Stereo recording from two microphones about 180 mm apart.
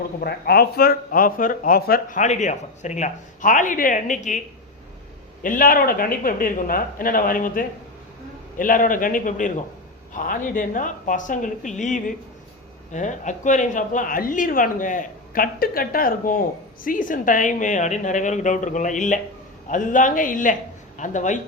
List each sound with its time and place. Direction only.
0.2 s speech: 60° left (ahead or behind); by 4.4 s 45° left (ahead or behind)
5.4 s speech: 50° left (ahead or behind)